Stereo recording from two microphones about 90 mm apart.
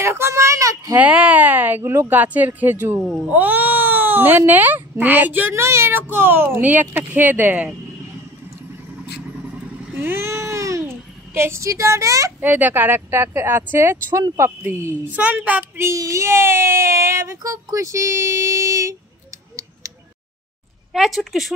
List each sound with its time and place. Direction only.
0.0 s a child's voice: 30° right (ahead or behind)
0.9 s speech: 15° right (ahead or behind)
9.9 s baby cry: 25° right (ahead or behind)
11.3 s speech: 30° right (ahead or behind)
12.4 s speech: 20° right (ahead or behind)
15.8 s speech: 35° right (ahead or behind)
20.9 s a woman's voice: centre (ahead or behind)